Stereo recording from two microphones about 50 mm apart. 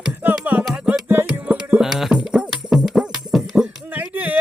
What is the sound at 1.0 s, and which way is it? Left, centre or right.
Music, right.